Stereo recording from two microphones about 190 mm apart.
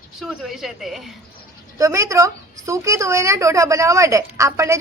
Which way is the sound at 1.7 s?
15° right (ahead or behind).